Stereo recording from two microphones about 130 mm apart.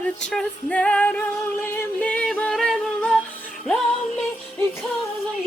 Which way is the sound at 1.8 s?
10° left (ahead or behind).